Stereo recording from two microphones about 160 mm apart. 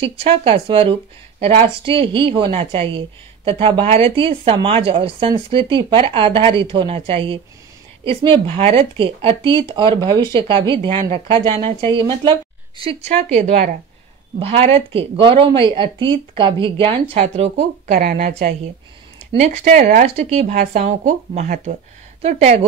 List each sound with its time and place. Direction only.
0.0 s speech: 35° right (ahead or behind)
17.9 s a woman's voice: 65° right (ahead or behind)
19.3 s speech: 45° right (ahead or behind)